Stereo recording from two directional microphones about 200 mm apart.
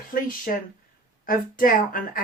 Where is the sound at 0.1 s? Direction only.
45° left (ahead or behind).